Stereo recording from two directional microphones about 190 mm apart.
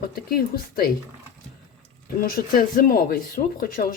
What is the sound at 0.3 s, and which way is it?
Speech, 50° left (ahead or behind).